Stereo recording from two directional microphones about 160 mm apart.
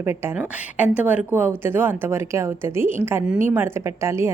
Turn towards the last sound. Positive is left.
turn(degrees=-15)  # may be behind; listen again after turning